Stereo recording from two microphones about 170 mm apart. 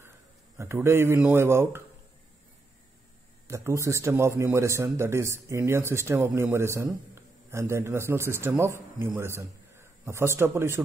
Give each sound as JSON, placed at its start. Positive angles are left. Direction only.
{"t": 0.6, "sound": "speech", "side_deg": -15}
{"t": 3.4, "sound": "a man's voice", "side_deg": -15}